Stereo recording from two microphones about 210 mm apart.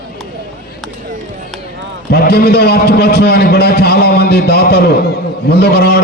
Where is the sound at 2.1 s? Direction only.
50° left (ahead or behind).